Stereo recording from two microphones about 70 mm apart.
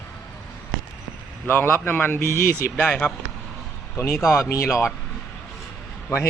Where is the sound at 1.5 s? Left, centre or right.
Left.